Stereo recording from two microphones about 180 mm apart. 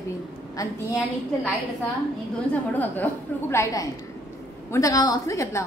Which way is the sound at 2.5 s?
10° left (ahead or behind).